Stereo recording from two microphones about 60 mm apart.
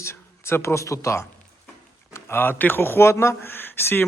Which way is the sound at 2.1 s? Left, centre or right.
Left.